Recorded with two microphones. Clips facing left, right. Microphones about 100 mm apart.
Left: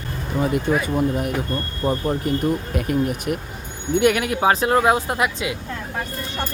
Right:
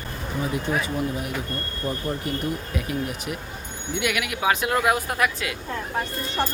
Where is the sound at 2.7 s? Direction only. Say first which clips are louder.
Left 6 dB; 50° left (ahead or behind).